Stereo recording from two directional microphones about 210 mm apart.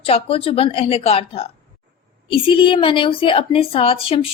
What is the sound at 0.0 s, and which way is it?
A woman's voice, 25° left (ahead or behind).